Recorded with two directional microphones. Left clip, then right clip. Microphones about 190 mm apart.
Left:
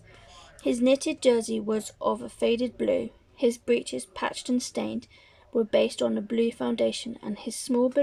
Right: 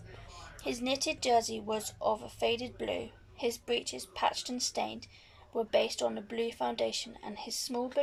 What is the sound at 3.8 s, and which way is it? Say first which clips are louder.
Speech: left 1 dB; 40° left (ahead or behind).